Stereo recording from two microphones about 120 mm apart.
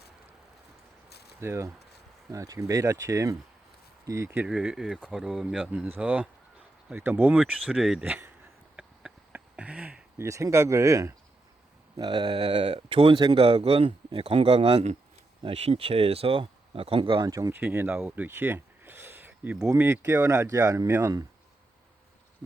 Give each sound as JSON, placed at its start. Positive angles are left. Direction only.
{"t": 1.4, "sound": "speech", "side_deg": -20}
{"t": 4.4, "sound": "speech", "side_deg": -5}
{"t": 8.0, "sound": "speech", "side_deg": -15}
{"t": 8.7, "sound": "a sound", "side_deg": -10}
{"t": 10.2, "sound": "speech", "side_deg": -25}
{"t": 11.9, "sound": "speech", "side_deg": -40}
{"t": 17.2, "sound": "speech", "side_deg": -30}
{"t": 17.5, "sound": "speech", "side_deg": -15}